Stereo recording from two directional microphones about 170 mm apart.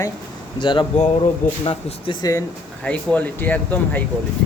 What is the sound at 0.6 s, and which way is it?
Speech, 25° left (ahead or behind).